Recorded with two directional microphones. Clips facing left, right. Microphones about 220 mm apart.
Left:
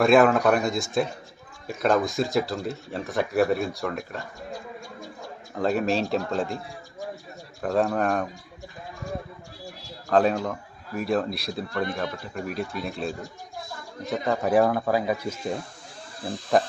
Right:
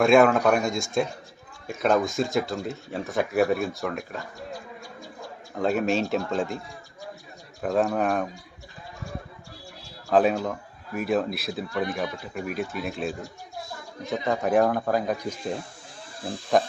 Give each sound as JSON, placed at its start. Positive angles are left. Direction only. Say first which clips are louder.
{"t": 0.0, "sound": "a man's voice", "louder": "even", "side_deg": 0}
{"t": 5.5, "sound": "a man's voice", "louder": "even", "side_deg": 0}
{"t": 7.6, "sound": "a man's voice", "louder": "even", "side_deg": 0}
{"t": 10.1, "sound": "a man's voice", "louder": "even", "side_deg": -5}
{"t": 14.1, "sound": "a man's voice", "louder": "left 1 dB", "side_deg": 0}